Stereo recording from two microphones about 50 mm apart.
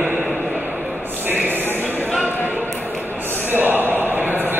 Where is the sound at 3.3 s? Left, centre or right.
Right.